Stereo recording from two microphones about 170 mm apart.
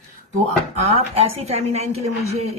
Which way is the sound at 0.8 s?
40° right (ahead or behind).